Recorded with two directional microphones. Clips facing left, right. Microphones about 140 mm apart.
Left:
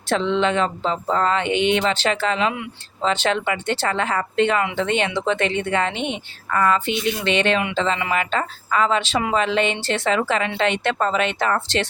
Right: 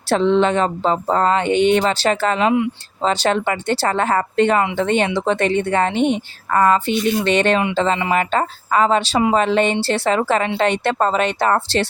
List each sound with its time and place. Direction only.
0.1 s speech: 40° right (ahead or behind)